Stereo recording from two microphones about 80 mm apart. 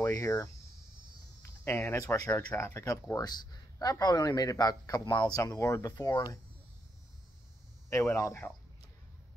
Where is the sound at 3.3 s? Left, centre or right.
Left.